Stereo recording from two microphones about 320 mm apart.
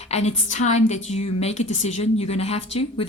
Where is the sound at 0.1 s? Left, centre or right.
Centre.